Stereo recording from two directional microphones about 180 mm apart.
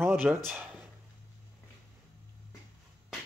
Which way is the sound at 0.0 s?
10° right (ahead or behind).